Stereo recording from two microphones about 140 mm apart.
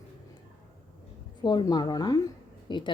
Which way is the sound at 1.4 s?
30° left (ahead or behind).